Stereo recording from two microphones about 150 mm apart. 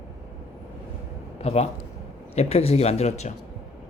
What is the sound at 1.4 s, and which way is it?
Speech, 45° left (ahead or behind).